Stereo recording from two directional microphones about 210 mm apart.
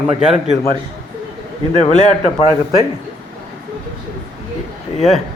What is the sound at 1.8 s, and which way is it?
Speech, 35° left (ahead or behind).